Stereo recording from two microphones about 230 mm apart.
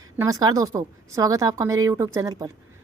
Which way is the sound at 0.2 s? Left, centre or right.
Centre.